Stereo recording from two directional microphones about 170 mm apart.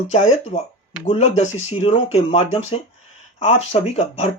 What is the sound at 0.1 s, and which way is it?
Speech, 40° left (ahead or behind).